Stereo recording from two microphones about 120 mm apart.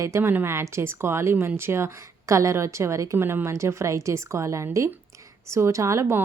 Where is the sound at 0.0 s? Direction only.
20° right (ahead or behind).